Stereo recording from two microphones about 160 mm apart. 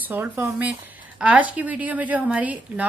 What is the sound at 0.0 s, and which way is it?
A woman's voice, 10° right (ahead or behind).